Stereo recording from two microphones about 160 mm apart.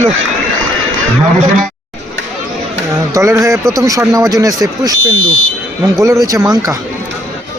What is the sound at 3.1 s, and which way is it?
Speech, 20° right (ahead or behind).